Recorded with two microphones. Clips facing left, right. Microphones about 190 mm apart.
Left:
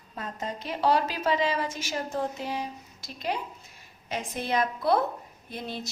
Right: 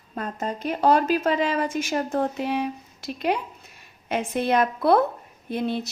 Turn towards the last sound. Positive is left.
turn(degrees=-60)  # may be behind; listen again after turning